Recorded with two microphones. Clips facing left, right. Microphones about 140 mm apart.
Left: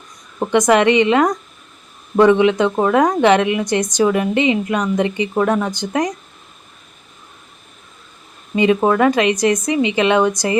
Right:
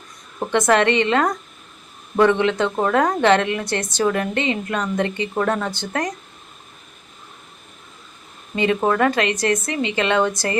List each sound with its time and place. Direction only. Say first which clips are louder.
0.3 s a woman's voice: left 4 dB; 15° left (ahead or behind)
8.5 s a woman's voice: left 4 dB; 15° left (ahead or behind)